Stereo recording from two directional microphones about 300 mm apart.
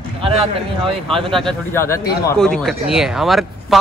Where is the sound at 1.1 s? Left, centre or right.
Centre.